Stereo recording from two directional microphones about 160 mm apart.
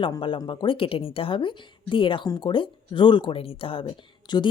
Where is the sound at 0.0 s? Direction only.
30° left (ahead or behind).